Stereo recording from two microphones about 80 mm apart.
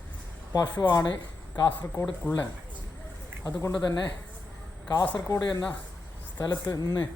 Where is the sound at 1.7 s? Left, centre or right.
Left.